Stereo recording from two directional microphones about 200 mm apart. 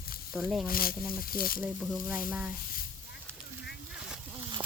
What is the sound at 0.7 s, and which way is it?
Speech, 45° left (ahead or behind).